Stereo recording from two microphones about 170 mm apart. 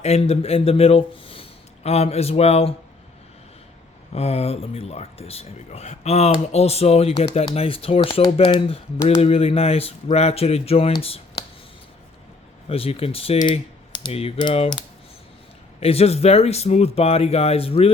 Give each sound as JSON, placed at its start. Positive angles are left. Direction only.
{"t": 0.0, "sound": "speech", "side_deg": 40}
{"t": 4.1, "sound": "speech", "side_deg": 35}
{"t": 12.6, "sound": "speech", "side_deg": 35}
{"t": 13.5, "sound": "typing", "side_deg": 30}
{"t": 15.8, "sound": "speech", "side_deg": 35}